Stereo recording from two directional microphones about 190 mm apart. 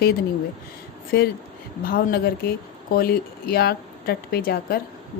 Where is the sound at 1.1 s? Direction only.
50° left (ahead or behind).